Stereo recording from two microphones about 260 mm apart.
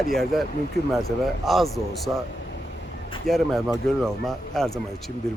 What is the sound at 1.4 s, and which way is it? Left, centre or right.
Speech, centre.